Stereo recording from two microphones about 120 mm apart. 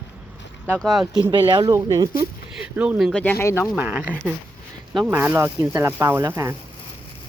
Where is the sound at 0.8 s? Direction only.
Centre (ahead or behind).